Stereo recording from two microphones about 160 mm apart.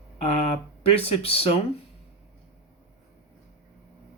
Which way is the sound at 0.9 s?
40° left (ahead or behind).